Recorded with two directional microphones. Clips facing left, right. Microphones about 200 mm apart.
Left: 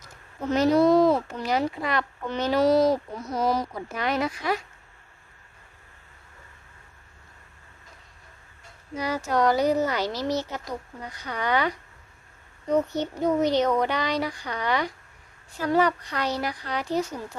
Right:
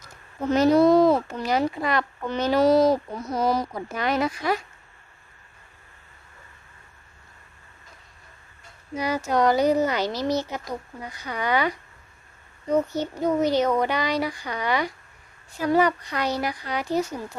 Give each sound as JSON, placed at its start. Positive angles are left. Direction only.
{"t": 0.5, "sound": "a child's voice", "side_deg": -50}
{"t": 9.0, "sound": "speech", "side_deg": -15}